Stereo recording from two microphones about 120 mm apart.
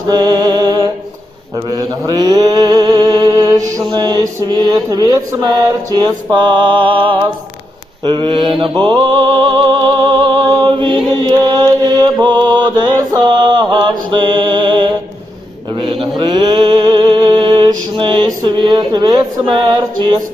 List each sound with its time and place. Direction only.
0.1 s music: 35° right (ahead or behind)
1.5 s mantra: 35° right (ahead or behind)
3.8 s music: 35° right (ahead or behind)
8.0 s mantra: 40° right (ahead or behind)